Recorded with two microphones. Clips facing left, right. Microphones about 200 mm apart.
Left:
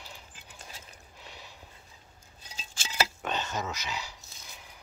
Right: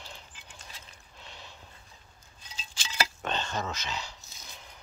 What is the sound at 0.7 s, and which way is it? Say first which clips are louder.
Mechanisms: left 4 dB; 40° left (ahead or behind).